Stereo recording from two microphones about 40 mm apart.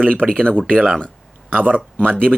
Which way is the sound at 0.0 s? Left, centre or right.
Left.